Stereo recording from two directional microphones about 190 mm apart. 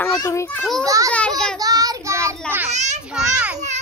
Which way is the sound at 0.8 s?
15° right (ahead or behind).